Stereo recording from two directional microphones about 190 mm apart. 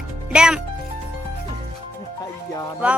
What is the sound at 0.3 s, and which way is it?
Speech, 5° right (ahead or behind).